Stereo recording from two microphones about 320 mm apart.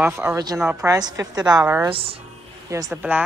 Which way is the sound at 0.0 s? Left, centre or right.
Centre.